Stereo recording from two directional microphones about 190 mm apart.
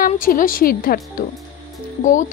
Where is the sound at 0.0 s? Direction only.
45° left (ahead or behind).